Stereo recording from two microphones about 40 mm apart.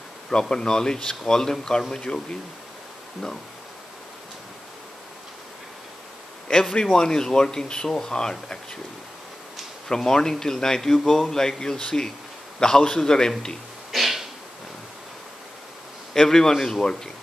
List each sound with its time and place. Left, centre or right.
0.3 s a man's voice: centre
6.4 s a man's voice: centre
9.8 s a man's voice: centre
13.9 s a sound: centre
16.1 s a man's voice: centre